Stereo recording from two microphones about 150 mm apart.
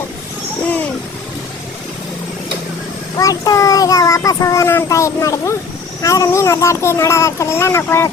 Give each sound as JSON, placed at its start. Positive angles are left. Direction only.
{"t": 3.2, "sound": "a child's voice", "side_deg": 25}